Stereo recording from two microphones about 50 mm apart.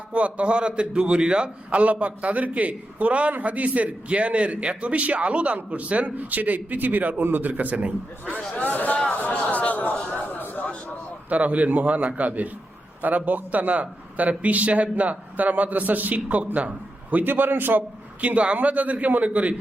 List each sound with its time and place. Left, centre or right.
0.1 s a man's voice: right
8.6 s a man's voice: left
9.0 s a sound: left
11.3 s a man's voice: right
17.2 s a man's voice: right